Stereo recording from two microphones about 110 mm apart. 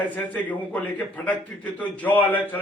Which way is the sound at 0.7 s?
15° left (ahead or behind).